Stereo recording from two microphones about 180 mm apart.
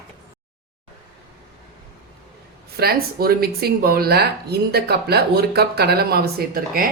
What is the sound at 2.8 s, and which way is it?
Speech, 60° right (ahead or behind).